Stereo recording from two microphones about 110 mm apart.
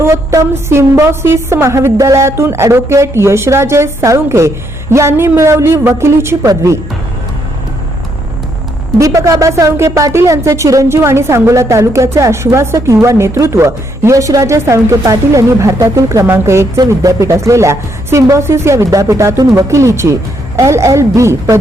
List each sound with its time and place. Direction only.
0.0 s a woman's voice: 25° right (ahead or behind)
9.0 s a woman's voice: 30° right (ahead or behind)